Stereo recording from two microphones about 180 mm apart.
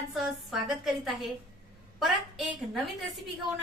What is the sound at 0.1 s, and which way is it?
A woman's voice, centre (ahead or behind).